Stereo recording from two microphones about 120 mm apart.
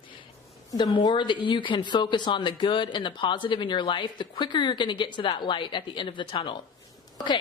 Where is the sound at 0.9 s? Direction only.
40° left (ahead or behind).